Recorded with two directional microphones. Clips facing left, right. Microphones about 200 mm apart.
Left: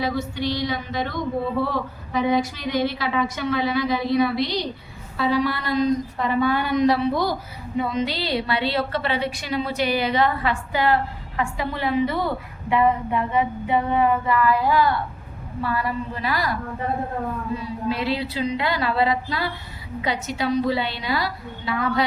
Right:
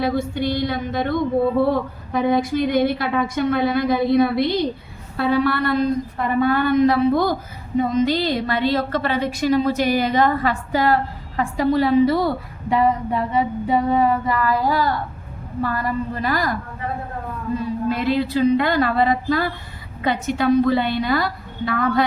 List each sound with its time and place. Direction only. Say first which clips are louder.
0.0 s a woman's voice: right 4 dB; 55° right (ahead or behind)
11.3 s female singing: right 8 dB; 40° right (ahead or behind)
15.6 s a woman's voice: right 2 dB; 45° right (ahead or behind)
17.8 s a woman's voice: right 3 dB; 50° right (ahead or behind)